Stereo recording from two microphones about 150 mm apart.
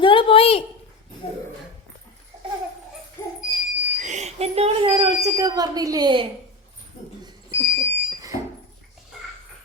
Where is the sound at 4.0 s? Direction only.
50° right (ahead or behind); by 6.3 s 30° right (ahead or behind).